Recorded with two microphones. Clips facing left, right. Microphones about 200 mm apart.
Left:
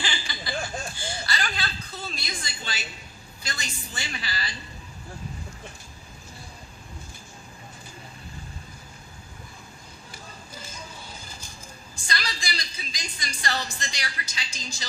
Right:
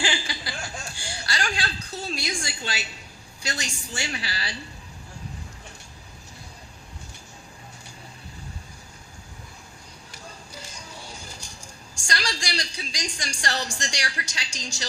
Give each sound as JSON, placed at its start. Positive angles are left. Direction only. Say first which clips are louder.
{"t": 0.0, "sound": "chuckle", "louder": "right 4 dB", "side_deg": -75}
{"t": 3.4, "sound": "a woman's voice", "louder": "right 4 dB", "side_deg": -75}
{"t": 10.1, "sound": "a sound", "louder": "right 1 dB", "side_deg": -75}